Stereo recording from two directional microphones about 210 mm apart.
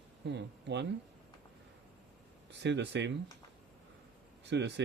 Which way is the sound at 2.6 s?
55° right (ahead or behind).